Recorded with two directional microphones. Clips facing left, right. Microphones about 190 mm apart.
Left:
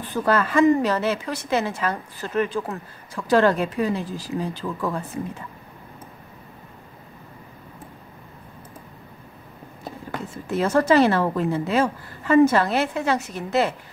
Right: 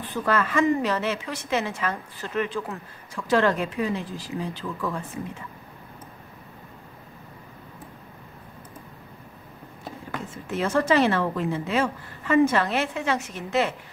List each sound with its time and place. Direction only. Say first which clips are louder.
0.2 s speech: left 4 dB; 35° left (ahead or behind)
10.1 s speech: left 4 dB; 40° left (ahead or behind)